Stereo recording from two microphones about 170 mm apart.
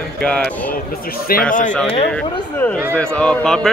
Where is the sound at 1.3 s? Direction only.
60° left (ahead or behind).